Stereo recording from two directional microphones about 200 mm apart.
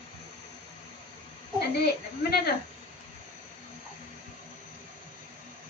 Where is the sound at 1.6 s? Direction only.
55° left (ahead or behind).